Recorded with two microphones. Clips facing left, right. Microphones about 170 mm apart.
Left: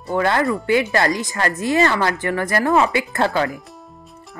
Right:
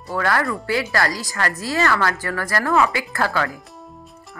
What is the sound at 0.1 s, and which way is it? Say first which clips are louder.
Speech: left 3 dB; 20° left (ahead or behind).